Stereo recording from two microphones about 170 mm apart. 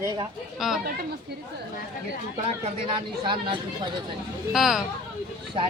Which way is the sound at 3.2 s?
30° right (ahead or behind).